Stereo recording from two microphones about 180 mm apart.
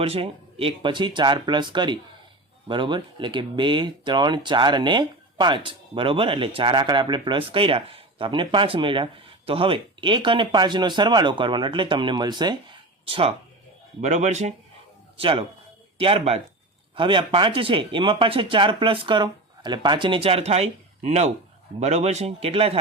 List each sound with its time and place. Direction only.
0.0 s speech: 30° right (ahead or behind)
15.2 s speech: 30° right (ahead or behind)